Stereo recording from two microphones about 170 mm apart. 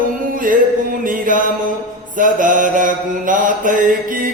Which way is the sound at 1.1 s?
50° right (ahead or behind).